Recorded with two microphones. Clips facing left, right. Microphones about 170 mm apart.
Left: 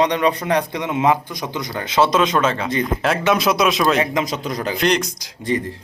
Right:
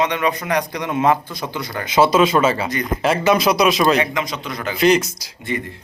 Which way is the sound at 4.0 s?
40° left (ahead or behind).